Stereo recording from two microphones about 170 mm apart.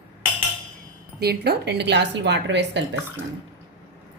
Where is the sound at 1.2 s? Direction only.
70° right (ahead or behind); by 2.8 s 90° right.